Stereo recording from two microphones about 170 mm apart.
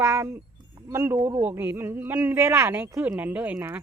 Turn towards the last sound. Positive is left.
turn(degrees=-10)  # may be behind; listen again after turning